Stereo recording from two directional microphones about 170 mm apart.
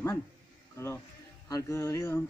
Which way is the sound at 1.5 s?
15° left (ahead or behind).